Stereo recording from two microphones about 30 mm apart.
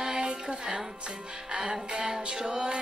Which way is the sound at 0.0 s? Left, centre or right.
Right.